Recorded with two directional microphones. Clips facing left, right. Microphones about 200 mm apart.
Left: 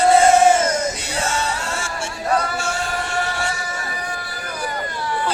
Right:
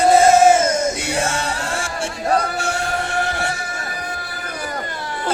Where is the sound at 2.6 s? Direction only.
60° right (ahead or behind).